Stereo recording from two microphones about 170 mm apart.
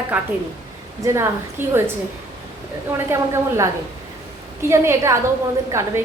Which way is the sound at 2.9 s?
15° right (ahead or behind).